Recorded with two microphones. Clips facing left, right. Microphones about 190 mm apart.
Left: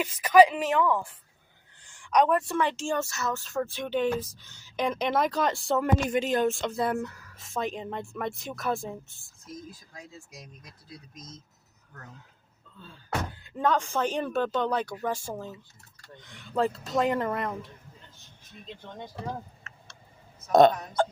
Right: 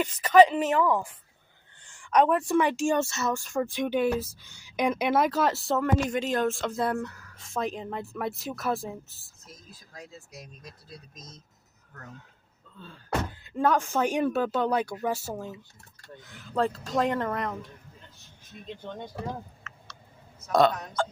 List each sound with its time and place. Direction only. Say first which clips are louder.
0.0 s speech: right 1 dB; 10° left (ahead or behind)
2.6 s speech: right 4 dB; 15° right (ahead or behind)
13.4 s speech: right 1 dB; 5° right (ahead or behind)
20.5 s speech: left 4 dB; 25° left (ahead or behind)